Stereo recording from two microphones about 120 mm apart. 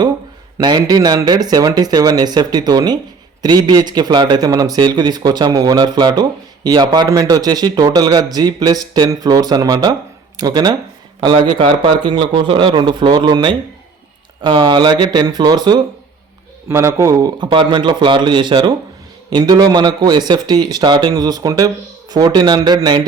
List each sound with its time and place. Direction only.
0.6 s a man's voice: 35° right (ahead or behind)
16.6 s a man's voice: 20° right (ahead or behind)
17.4 s a man's voice: 40° right (ahead or behind)